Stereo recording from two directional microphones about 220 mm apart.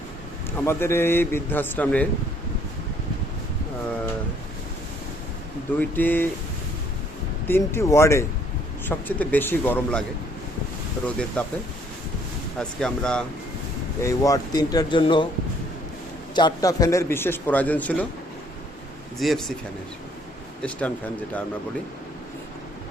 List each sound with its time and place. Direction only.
0.6 s a man's voice: 10° left (ahead or behind)
6.0 s a man's voice: 10° left (ahead or behind)
7.4 s a man's voice: 10° left (ahead or behind)
11.0 s speech: 5° left (ahead or behind)
12.5 s speech: 5° left (ahead or behind)
14.0 s a man's voice: 15° left (ahead or behind)
16.3 s a man's voice: 20° left (ahead or behind)
19.2 s speech: centre (ahead or behind)
20.6 s speech: 5° left (ahead or behind)